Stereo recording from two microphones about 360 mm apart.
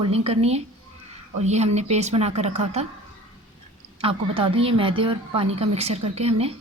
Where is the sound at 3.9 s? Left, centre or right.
Centre.